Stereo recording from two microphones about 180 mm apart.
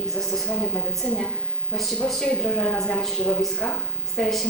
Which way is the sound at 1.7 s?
Centre (ahead or behind).